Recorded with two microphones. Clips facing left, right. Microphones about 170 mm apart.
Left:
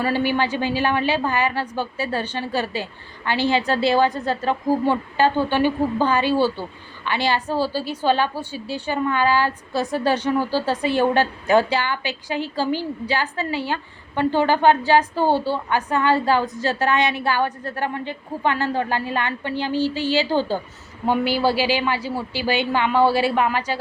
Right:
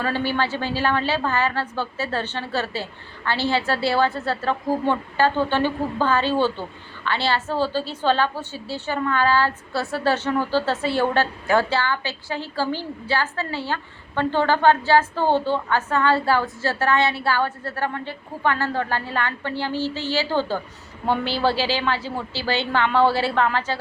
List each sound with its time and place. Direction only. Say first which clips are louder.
0.0 s a woman's voice: left 3 dB; 15° left (ahead or behind)